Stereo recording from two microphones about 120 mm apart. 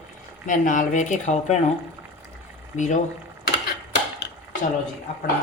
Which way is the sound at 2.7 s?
90° left.